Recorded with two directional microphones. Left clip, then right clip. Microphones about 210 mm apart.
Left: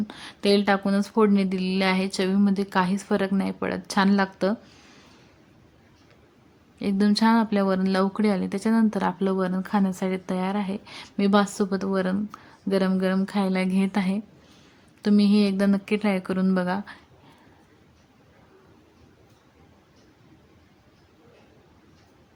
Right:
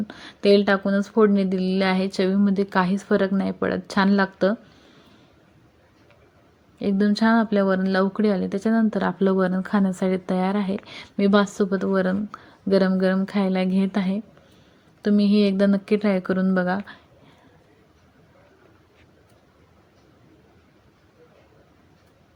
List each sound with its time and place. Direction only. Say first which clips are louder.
0.1 s speech: right 5 dB; 5° right (ahead or behind)
6.7 s speech: right 1 dB; 5° right (ahead or behind)